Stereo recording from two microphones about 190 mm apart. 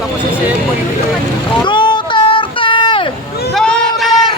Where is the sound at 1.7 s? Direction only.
25° left (ahead or behind).